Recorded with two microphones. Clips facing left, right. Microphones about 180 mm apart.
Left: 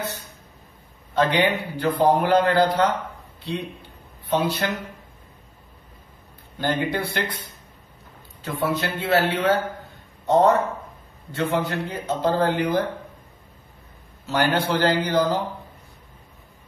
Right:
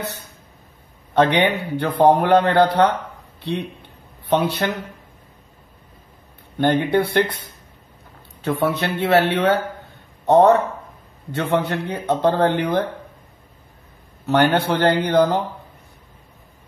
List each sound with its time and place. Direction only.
1.1 s a man's voice: 70° right (ahead or behind)
4.3 s a man's voice: 65° right (ahead or behind)
6.6 s a man's voice: 60° right (ahead or behind)
8.4 s a man's voice: 70° right (ahead or behind)
10.2 s a man's voice: 60° right (ahead or behind)
14.2 s a man's voice: 65° right (ahead or behind)